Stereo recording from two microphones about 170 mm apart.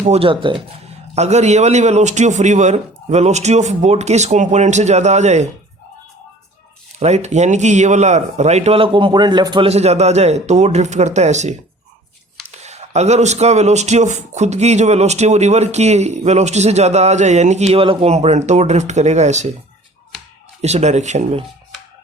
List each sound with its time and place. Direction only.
0.0 s speech: 35° right (ahead or behind)
7.0 s speech: 40° right (ahead or behind)
9.6 s speech: 40° right (ahead or behind)
12.6 s speech: 40° right (ahead or behind)
20.6 s speech: 40° right (ahead or behind)